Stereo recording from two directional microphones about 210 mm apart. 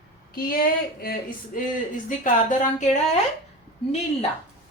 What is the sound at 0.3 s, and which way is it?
A woman's voice, 45° left (ahead or behind).